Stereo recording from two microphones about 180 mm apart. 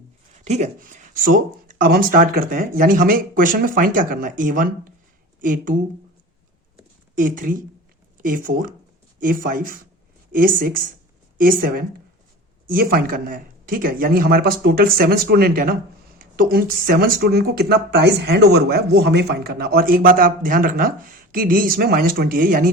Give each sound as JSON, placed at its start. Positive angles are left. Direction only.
{"t": 0.3, "sound": "speech", "side_deg": -40}
{"t": 7.2, "sound": "speech", "side_deg": -50}